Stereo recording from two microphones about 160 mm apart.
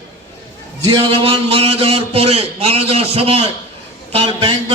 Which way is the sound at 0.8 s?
30° right (ahead or behind).